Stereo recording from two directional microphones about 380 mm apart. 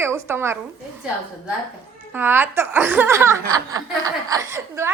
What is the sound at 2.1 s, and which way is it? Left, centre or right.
Speech, centre.